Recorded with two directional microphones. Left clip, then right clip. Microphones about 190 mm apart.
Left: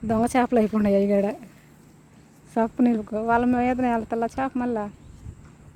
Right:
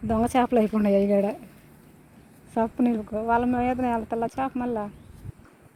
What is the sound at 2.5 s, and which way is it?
Speech, 20° left (ahead or behind).